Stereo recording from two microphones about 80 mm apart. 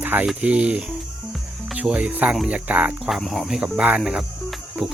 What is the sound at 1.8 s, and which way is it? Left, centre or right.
Speech, centre.